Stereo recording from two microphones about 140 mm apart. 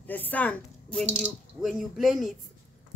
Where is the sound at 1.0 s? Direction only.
5° right (ahead or behind).